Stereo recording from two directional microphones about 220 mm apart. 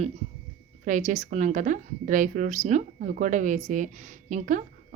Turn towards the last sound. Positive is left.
turn(degrees=-35)  # may be behind; listen again after turning